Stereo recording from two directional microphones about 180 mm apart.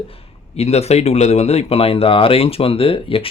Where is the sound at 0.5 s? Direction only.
35° left (ahead or behind).